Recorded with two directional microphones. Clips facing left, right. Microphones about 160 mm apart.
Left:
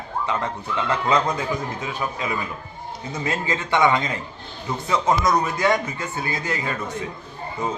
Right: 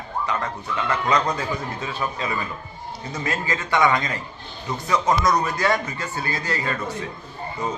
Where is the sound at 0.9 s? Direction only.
20° left (ahead or behind).